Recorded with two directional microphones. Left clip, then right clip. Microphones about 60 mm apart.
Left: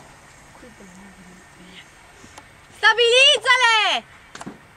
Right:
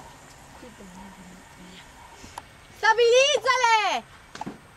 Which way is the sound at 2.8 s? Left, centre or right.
Left.